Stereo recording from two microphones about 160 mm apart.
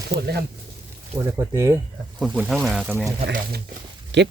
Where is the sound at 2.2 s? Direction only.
5° right (ahead or behind).